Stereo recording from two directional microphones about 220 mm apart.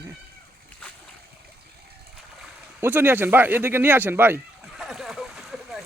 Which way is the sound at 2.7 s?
10° right (ahead or behind).